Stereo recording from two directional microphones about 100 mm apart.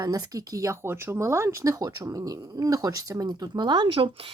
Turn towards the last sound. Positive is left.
turn(degrees=-60)  # may be behind; listen again after turning